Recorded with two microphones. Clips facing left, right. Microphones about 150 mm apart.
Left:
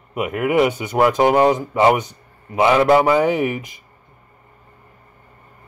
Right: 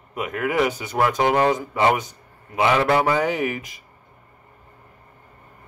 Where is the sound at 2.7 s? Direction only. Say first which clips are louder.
Left 5 dB; 15° left (ahead or behind).